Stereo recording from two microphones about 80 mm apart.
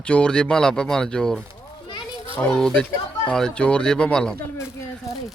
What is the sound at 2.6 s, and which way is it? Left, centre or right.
Speech, centre.